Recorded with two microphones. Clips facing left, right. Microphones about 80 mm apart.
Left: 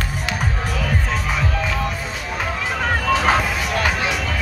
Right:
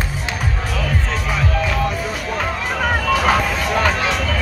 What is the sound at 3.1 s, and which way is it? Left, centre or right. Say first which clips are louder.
Music: even; left.